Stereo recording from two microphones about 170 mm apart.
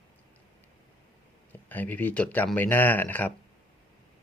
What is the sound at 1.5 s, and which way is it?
Speech, 10° left (ahead or behind).